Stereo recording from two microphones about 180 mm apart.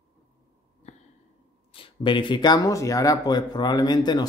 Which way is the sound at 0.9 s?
40° left (ahead or behind).